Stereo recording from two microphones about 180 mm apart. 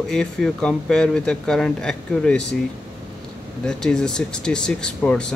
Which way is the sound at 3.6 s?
5° left (ahead or behind).